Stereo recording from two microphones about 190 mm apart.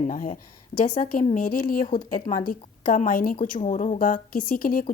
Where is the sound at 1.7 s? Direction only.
50° left (ahead or behind).